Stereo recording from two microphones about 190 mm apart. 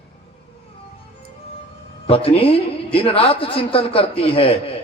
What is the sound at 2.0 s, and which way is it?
A man's voice, 30° left (ahead or behind).